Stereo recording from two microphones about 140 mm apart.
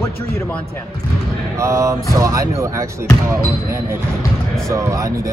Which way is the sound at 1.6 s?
20° right (ahead or behind).